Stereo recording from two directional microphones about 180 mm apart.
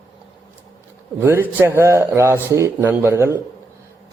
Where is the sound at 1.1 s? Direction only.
10° right (ahead or behind).